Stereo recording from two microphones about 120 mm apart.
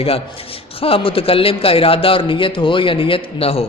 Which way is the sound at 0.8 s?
50° left (ahead or behind).